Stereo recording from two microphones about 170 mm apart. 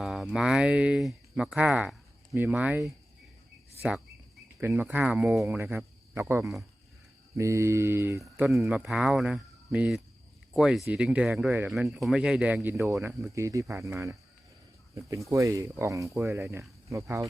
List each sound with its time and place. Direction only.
0.0 s speech: centre (ahead or behind)
3.8 s cricket: 5° right (ahead or behind)
4.6 s speech: 10° right (ahead or behind)
5.5 s cricket: 10° right (ahead or behind)
6.4 s speech: centre (ahead or behind)
7.3 s speech: 15° right (ahead or behind)
8.2 s speech: centre (ahead or behind); by 14.2 s 15° right (ahead or behind)
15.3 s speech: 20° right (ahead or behind)